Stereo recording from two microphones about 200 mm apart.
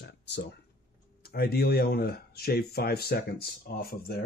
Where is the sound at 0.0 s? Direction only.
60° left (ahead or behind).